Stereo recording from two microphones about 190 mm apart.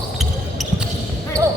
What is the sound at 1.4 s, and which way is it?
Basketball bounce, 15° right (ahead or behind).